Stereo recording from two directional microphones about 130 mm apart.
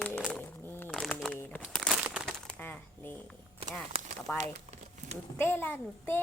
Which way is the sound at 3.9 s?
50° right (ahead or behind).